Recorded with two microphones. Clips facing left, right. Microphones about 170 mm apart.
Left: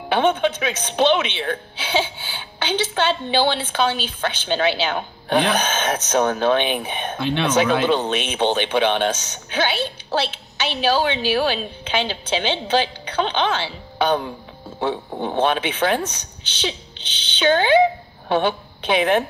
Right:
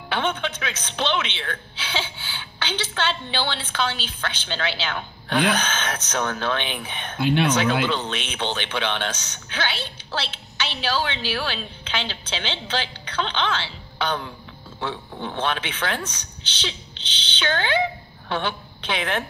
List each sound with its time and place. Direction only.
0.1 s a woman's voice: 15° left (ahead or behind)
15.0 s a man's voice: 45° left (ahead or behind)
15.3 s a woman's voice: 15° left (ahead or behind)
17.2 s a woman's voice: 15° left (ahead or behind)